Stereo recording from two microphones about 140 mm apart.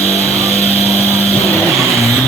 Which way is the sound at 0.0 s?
50° left (ahead or behind).